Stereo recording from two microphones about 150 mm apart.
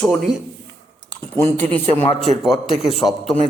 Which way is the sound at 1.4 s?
15° left (ahead or behind).